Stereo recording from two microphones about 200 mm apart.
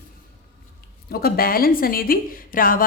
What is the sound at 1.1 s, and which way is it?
Speech, 50° left (ahead or behind).